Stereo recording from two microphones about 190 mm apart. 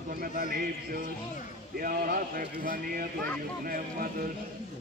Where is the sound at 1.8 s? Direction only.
50° right (ahead or behind).